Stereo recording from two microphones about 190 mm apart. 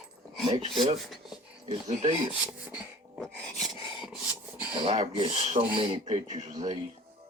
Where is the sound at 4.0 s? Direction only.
5° right (ahead or behind).